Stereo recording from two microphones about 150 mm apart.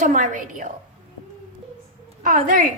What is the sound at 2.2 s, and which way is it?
Speech, 65° right (ahead or behind).